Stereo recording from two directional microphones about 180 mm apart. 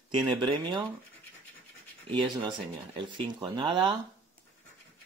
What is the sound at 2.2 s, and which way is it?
Speech, 30° right (ahead or behind).